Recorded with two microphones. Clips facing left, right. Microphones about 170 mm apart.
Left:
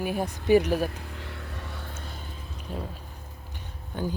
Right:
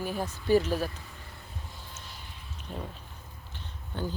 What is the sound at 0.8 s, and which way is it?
Vehicle, 65° left (ahead or behind).